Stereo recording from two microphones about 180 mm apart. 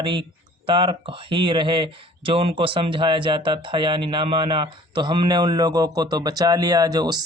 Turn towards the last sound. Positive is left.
turn(degrees=-20)  # may be behind; listen again after turning